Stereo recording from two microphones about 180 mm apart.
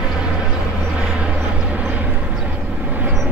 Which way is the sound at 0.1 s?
5° right (ahead or behind).